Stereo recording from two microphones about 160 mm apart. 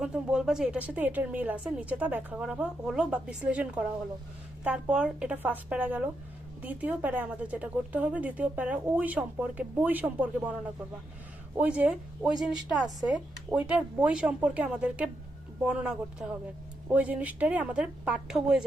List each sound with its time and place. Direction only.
0.0 s speech: 5° right (ahead or behind)
11.5 s speech: 10° right (ahead or behind)